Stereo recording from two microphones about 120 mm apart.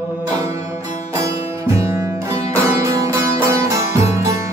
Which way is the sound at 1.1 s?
25° right (ahead or behind).